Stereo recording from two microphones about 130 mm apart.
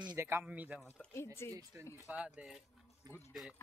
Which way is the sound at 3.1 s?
30° right (ahead or behind).